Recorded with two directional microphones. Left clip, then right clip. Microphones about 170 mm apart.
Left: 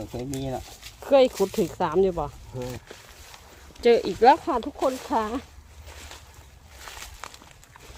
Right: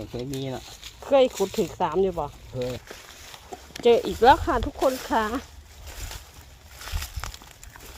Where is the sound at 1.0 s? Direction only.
30° left (ahead or behind).